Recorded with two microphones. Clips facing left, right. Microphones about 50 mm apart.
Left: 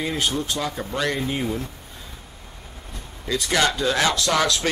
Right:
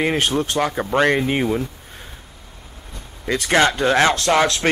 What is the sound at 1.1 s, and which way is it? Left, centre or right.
Speech, right.